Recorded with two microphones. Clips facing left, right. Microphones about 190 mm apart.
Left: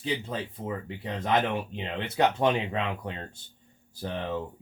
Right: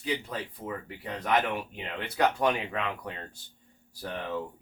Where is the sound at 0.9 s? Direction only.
25° left (ahead or behind).